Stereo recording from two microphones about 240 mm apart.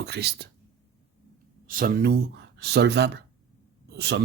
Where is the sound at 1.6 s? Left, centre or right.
Right.